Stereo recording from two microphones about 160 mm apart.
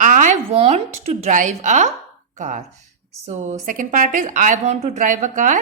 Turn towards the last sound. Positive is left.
turn(degrees=-55)  # may be behind; listen again after turning